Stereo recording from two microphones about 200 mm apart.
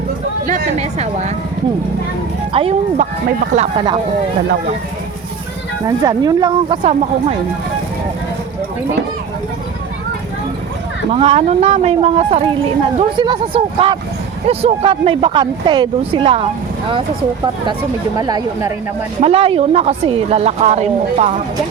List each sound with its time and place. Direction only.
0.4 s a woman's voice: 35° right (ahead or behind)
2.5 s a woman's voice: 30° right (ahead or behind)
5.8 s speech: 15° right (ahead or behind)
11.1 s speech: 30° right (ahead or behind)
18.2 s a woman's voice: 20° right (ahead or behind); by 21.3 s 35° right (ahead or behind)